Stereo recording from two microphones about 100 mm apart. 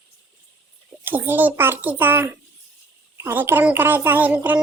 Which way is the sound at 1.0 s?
20° right (ahead or behind).